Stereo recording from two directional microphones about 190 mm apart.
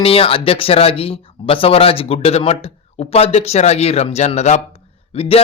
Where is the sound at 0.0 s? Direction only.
30° left (ahead or behind).